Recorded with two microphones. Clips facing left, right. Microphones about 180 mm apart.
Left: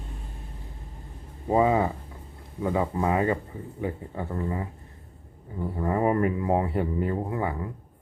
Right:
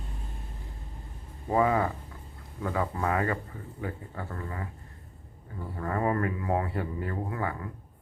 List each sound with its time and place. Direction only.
1.5 s speech: 20° left (ahead or behind)